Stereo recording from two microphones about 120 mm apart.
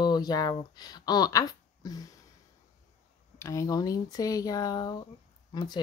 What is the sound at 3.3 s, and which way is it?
Speech, 25° left (ahead or behind).